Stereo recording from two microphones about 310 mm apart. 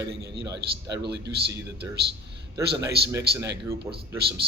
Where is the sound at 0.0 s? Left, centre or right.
Right.